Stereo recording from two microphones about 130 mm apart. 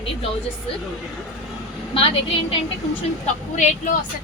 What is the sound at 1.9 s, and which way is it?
Speech, 45° left (ahead or behind).